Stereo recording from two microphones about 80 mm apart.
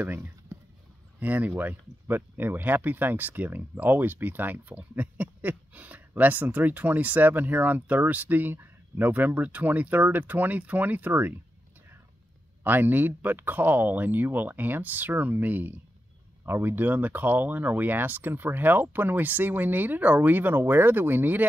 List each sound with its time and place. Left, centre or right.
0.0 s speech: right
12.6 s speech: right